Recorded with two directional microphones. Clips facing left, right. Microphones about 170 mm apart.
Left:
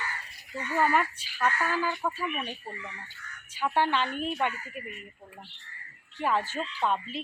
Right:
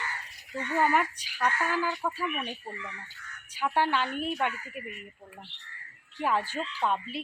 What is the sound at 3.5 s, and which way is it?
A woman's voice, 10° right (ahead or behind).